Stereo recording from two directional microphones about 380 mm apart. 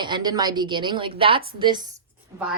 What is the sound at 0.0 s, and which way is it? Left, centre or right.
A woman's voice, centre.